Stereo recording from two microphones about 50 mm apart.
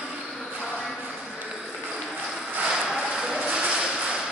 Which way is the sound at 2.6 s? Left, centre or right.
Centre.